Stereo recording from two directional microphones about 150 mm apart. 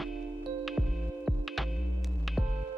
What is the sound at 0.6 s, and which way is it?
Music, centre (ahead or behind).